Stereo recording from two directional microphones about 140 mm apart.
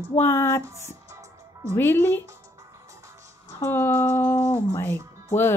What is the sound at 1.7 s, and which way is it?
Speech, 15° left (ahead or behind).